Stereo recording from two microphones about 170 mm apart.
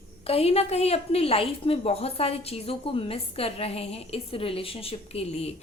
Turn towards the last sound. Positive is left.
turn(degrees=35)  # may be behind; listen again after turning